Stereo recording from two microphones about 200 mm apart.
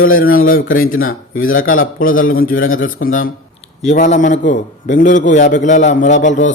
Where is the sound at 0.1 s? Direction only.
45° left (ahead or behind).